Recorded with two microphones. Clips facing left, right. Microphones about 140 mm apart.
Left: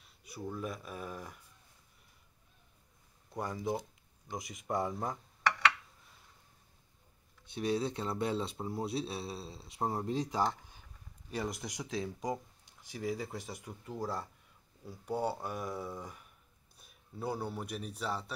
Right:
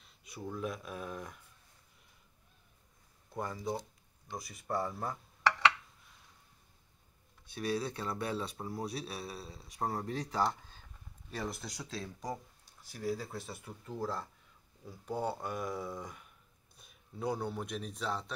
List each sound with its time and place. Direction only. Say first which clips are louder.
0.3 s speech: right 1 dB; centre (ahead or behind)
3.3 s speech: left 2 dB; 10° left (ahead or behind)
7.4 s speech: left 2 dB; 25° left (ahead or behind)